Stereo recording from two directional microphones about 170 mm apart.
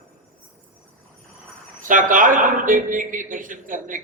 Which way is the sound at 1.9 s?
50° right (ahead or behind).